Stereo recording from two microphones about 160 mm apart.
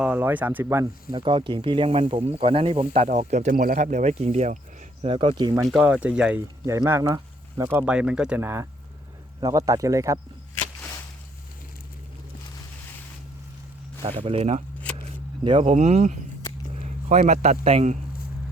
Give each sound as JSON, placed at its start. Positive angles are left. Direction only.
{"t": 0.0, "sound": "speech", "side_deg": -10}
{"t": 1.1, "sound": "speech", "side_deg": -35}
{"t": 5.0, "sound": "speech", "side_deg": -35}
{"t": 5.6, "sound": "speech", "side_deg": -5}
{"t": 14.0, "sound": "speech", "side_deg": -35}
{"t": 15.7, "sound": "speech", "side_deg": -45}